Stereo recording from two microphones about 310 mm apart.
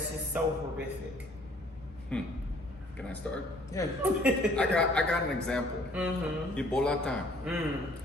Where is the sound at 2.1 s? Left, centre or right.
Centre.